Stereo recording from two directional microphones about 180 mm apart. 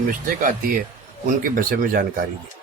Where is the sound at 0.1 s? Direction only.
50° right (ahead or behind).